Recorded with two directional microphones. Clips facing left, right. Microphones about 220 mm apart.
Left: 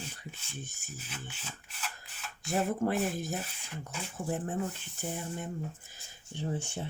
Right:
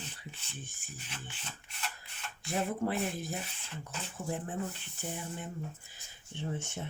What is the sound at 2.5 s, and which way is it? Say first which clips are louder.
Speech: left 3 dB; 45° left (ahead or behind).